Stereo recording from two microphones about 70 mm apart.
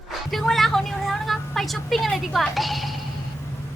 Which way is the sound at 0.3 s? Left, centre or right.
Centre.